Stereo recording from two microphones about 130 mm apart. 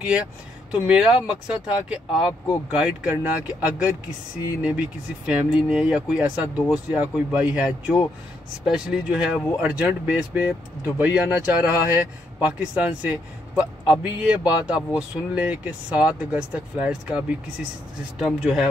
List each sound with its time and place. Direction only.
0.0 s speech: 10° right (ahead or behind)
6.5 s speech: 25° left (ahead or behind)
6.9 s speech: 10° right (ahead or behind)